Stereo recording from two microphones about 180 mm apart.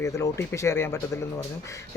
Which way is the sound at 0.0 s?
15° left (ahead or behind).